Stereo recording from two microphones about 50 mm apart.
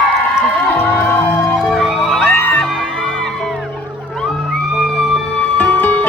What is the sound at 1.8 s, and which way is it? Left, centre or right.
Music, centre.